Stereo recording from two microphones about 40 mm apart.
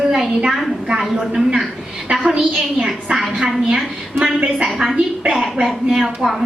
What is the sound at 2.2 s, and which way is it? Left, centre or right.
A woman's voice, right.